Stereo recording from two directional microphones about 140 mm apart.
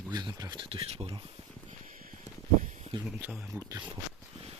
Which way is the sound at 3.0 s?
5° right (ahead or behind).